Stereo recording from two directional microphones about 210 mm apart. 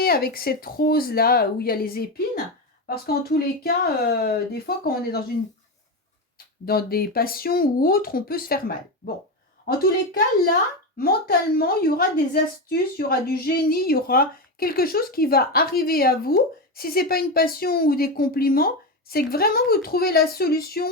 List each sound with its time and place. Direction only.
0.0 s a woman's voice: 45° left (ahead or behind)
6.7 s a woman's voice: 45° left (ahead or behind)
10.9 s a woman's voice: 45° left (ahead or behind)